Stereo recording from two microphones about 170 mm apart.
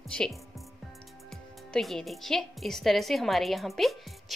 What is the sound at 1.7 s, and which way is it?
A woman's voice, centre (ahead or behind).